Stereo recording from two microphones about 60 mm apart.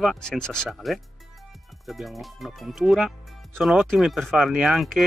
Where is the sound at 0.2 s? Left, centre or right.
Centre.